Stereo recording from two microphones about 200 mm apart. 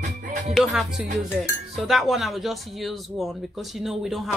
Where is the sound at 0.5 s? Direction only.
5° right (ahead or behind).